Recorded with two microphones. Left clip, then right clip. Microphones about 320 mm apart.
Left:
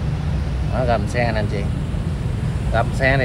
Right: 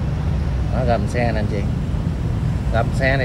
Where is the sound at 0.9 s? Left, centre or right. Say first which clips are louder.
Even; centre.